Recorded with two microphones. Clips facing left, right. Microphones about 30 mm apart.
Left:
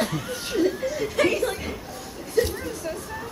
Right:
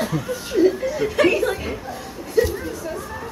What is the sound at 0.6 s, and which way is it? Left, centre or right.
Laughter, centre.